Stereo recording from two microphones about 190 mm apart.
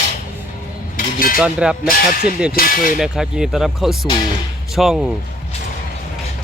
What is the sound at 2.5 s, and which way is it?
Speech, 50° left (ahead or behind).